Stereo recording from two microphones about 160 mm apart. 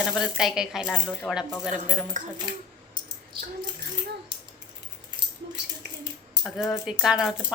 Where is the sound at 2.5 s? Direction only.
25° right (ahead or behind).